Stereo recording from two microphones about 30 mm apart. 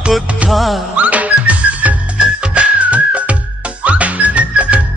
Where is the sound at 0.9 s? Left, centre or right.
Right.